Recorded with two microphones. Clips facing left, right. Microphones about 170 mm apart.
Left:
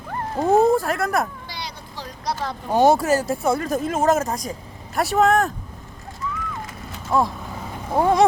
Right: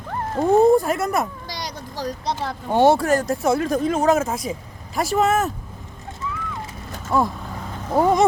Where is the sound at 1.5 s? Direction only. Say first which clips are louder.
Right 3 dB; 40° right (ahead or behind).